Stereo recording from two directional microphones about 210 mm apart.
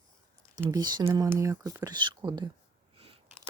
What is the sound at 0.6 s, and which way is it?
Speech, 20° right (ahead or behind).